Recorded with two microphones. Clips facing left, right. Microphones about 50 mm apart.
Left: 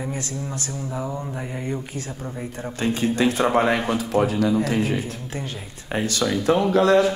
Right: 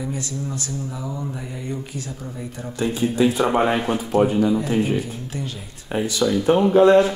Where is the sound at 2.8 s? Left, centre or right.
Left.